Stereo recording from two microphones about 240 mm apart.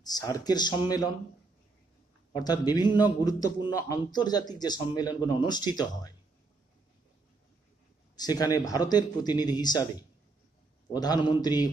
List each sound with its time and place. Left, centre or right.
0.0 s a man's voice: centre
2.3 s a man's voice: centre
8.2 s a man's voice: centre
10.9 s a man's voice: centre